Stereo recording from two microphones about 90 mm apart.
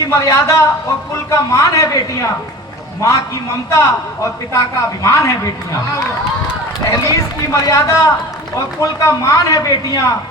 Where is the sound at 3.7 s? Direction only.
35° left (ahead or behind).